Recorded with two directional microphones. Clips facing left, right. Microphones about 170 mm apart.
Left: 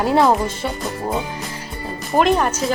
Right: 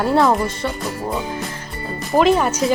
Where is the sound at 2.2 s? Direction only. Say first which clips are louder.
Right 1 dB; 5° right (ahead or behind).